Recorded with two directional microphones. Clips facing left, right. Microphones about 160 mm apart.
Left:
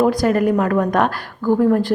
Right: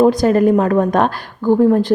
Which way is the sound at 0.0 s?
25° right (ahead or behind).